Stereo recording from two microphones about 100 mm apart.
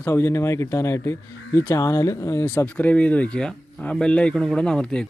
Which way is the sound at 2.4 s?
15° left (ahead or behind).